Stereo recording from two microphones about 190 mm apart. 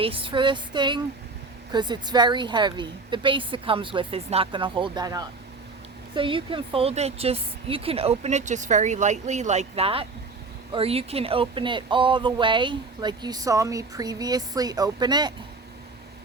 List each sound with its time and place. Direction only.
0.0 s a woman's voice: 30° right (ahead or behind)